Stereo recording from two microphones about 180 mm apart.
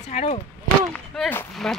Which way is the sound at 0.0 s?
35° left (ahead or behind).